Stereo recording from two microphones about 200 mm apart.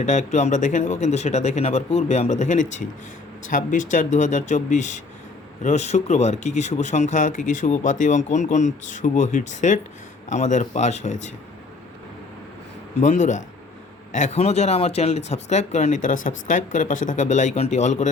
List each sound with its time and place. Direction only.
0.0 s speech: 35° left (ahead or behind)
13.0 s speech: 35° left (ahead or behind)